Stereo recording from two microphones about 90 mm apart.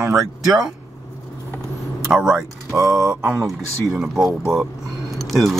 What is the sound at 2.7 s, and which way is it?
Speech, 35° right (ahead or behind).